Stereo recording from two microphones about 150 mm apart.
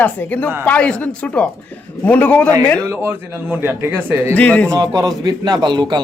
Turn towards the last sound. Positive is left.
turn(degrees=-30)  # may be behind; listen again after turning